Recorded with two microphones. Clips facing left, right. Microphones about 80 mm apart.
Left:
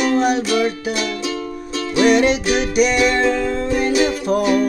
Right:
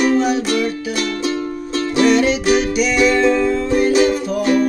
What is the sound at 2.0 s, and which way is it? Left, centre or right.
Music, left.